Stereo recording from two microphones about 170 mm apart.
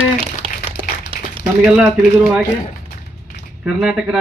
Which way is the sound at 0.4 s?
35° right (ahead or behind).